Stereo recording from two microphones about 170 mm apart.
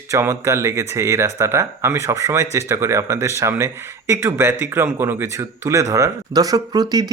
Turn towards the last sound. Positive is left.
turn(degrees=-25)  # may be behind; listen again after turning